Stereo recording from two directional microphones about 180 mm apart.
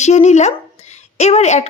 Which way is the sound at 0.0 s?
40° left (ahead or behind).